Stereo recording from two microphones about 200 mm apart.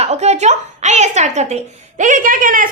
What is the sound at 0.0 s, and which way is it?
A woman's voice, 35° right (ahead or behind).